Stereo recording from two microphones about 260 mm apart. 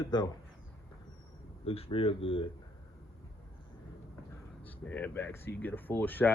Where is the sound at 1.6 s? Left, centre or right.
Left.